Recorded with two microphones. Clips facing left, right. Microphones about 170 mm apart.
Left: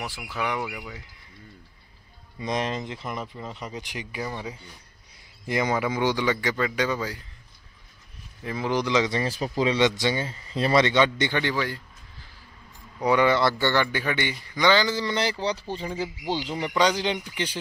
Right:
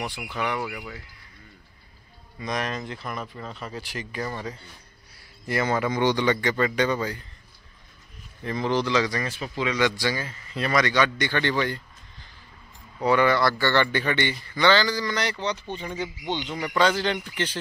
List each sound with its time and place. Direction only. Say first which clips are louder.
0.0 s a man's voice: right 1 dB; 5° left (ahead or behind)
2.4 s a man's voice: left 2 dB; 25° left (ahead or behind); by 7.2 s centre (ahead or behind)
8.4 s speech: right 1 dB; 5° left (ahead or behind); by 9.3 s 25° left (ahead or behind)
9.3 s speech: left 4 dB; 35° left (ahead or behind)
9.8 s speech: left 2 dB; 20° left (ahead or behind)
11.3 s a sound: right 1 dB; 5° left (ahead or behind)
13.0 s speech: even; 15° left (ahead or behind); by 16.5 s 35° left (ahead or behind)
16.6 s speech: right 1 dB; 15° left (ahead or behind)